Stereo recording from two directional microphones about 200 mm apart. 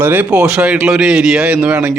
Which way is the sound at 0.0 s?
10° right (ahead or behind).